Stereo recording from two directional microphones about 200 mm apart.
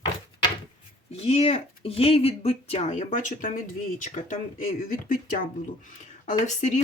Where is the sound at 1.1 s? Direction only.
30° left (ahead or behind).